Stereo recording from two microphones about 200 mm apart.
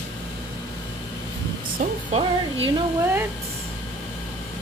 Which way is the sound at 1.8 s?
45° right (ahead or behind).